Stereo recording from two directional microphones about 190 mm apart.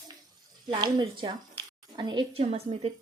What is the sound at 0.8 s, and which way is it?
A woman's voice, 25° right (ahead or behind).